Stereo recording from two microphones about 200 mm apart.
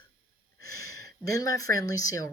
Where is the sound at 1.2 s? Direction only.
15° left (ahead or behind).